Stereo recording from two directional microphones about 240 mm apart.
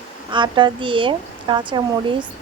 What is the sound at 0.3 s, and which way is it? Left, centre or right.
Speech, centre.